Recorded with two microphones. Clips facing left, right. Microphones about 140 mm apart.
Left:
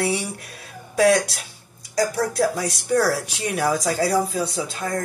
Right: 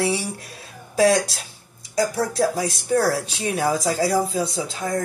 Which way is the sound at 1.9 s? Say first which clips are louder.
Even; 25° right (ahead or behind).